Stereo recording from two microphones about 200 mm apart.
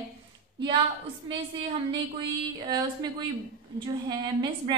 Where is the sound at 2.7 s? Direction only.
20° right (ahead or behind).